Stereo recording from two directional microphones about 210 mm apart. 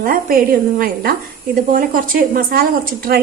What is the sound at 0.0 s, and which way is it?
A woman's voice, 45° right (ahead or behind).